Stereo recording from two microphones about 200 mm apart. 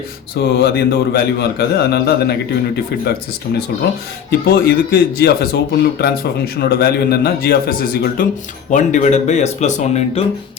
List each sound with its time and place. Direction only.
0.6 s speech: 55° left (ahead or behind)
4.3 s speech: 50° left (ahead or behind); by 10.2 s 35° left (ahead or behind)